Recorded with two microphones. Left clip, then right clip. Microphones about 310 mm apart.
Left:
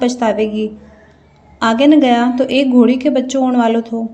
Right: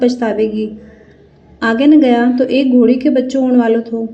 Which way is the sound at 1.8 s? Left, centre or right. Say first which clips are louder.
Right 1 dB; left.